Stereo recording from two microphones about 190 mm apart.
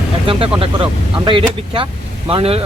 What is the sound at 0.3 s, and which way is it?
Speech, 30° right (ahead or behind).